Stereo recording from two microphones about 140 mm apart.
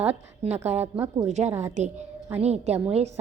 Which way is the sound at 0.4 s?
50° right (ahead or behind).